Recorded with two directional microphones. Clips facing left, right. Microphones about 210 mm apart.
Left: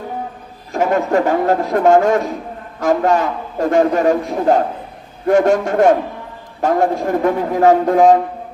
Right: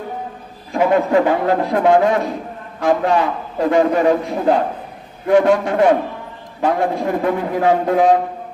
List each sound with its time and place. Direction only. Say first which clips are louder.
0.7 s a man's voice: right 1 dB; 45° left (ahead or behind)